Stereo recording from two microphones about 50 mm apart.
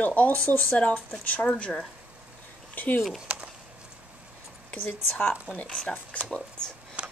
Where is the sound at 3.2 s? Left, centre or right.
Right.